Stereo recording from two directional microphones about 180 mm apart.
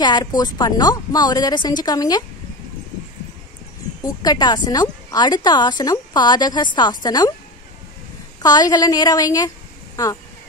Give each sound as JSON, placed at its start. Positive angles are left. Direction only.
{"t": 0.0, "sound": "a woman's voice", "side_deg": 25}
{"t": 4.0, "sound": "a woman's voice", "side_deg": 20}
{"t": 8.4, "sound": "a woman's voice", "side_deg": 20}